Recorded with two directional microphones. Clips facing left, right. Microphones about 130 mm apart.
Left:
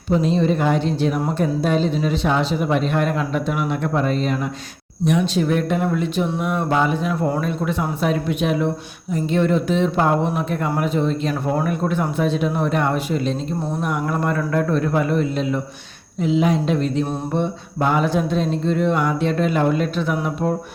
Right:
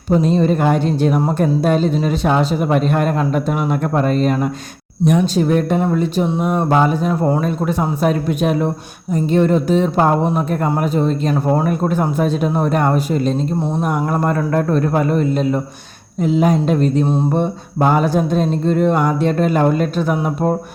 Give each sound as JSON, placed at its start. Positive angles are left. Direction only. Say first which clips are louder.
{"t": 0.1, "sound": "a woman's voice", "louder": "right 3 dB", "side_deg": -45}